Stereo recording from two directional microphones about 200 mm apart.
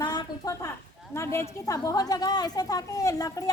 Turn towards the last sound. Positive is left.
turn(degrees=15)  # may be behind; listen again after turning